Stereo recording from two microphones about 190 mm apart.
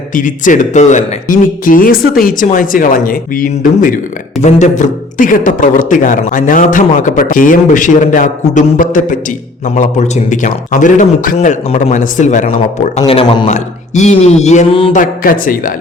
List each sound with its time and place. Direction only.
0.1 s a man's voice: 45° left (ahead or behind)
13.1 s a man's voice: 30° left (ahead or behind)
14.9 s a man's voice: 45° left (ahead or behind)